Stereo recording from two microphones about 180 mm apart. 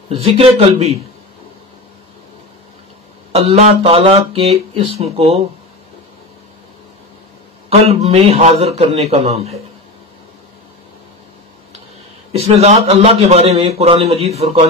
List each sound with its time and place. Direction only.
0.2 s a man's voice: 35° right (ahead or behind)
3.3 s a man's voice: 35° right (ahead or behind)
7.7 s a man's voice: 35° right (ahead or behind)
12.3 s a man's voice: 35° right (ahead or behind)